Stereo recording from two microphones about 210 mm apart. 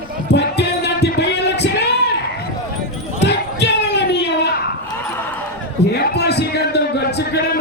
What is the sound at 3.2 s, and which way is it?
Basketball bounce, 55° left (ahead or behind).